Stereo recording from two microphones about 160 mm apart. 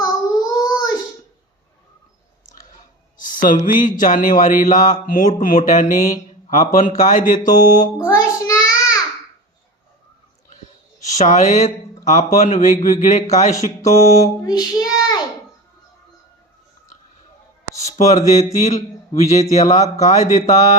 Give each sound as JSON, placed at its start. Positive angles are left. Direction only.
{"t": 0.0, "sound": "child singing", "side_deg": 25}
{"t": 3.7, "sound": "speech", "side_deg": 55}
{"t": 7.9, "sound": "child singing", "side_deg": 20}
{"t": 11.0, "sound": "speech", "side_deg": 50}
{"t": 14.3, "sound": "child singing", "side_deg": 25}
{"t": 17.9, "sound": "a sound", "side_deg": 45}
{"t": 18.3, "sound": "speech", "side_deg": 45}